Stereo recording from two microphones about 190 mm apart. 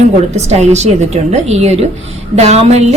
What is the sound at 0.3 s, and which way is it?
A woman's voice, 35° right (ahead or behind).